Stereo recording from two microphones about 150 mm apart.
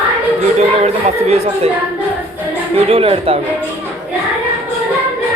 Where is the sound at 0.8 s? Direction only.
45° right (ahead or behind).